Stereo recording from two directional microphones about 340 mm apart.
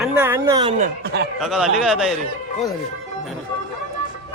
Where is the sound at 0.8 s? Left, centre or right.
Right.